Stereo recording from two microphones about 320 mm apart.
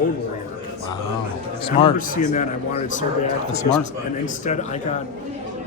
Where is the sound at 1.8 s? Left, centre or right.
Left.